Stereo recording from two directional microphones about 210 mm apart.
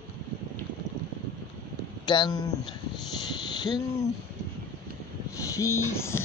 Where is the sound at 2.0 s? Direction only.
20° left (ahead or behind).